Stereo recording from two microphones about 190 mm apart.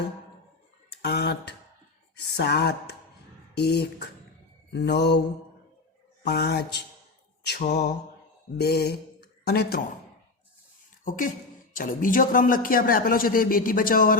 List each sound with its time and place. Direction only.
1.0 s speech: 60° left (ahead or behind)
3.5 s a sound: 60° left (ahead or behind)
4.7 s speech: 60° left (ahead or behind)
6.2 s speech: 60° left (ahead or behind)
11.7 s speech: 45° left (ahead or behind)